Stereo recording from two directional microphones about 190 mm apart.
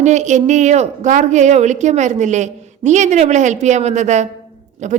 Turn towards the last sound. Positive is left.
turn(degrees=-40)  # may be behind; listen again after turning